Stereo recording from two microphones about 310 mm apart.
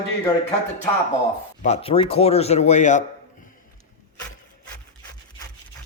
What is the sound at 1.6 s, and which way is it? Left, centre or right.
Speech, centre.